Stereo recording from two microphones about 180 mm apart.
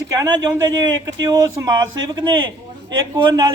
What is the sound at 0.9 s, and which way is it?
A man's voice, 20° right (ahead or behind).